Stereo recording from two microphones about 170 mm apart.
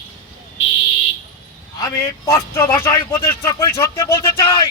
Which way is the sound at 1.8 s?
20° left (ahead or behind).